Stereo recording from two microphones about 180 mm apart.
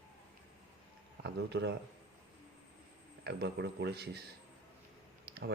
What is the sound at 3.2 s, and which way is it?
Speech, 70° right (ahead or behind).